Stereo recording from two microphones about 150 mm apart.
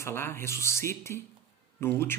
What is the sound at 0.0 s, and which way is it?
Speech, 15° left (ahead or behind).